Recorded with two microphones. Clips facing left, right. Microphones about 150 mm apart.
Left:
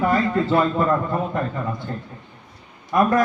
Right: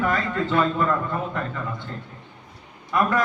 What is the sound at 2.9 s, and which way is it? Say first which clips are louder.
Speech: left 4 dB; 40° left (ahead or behind).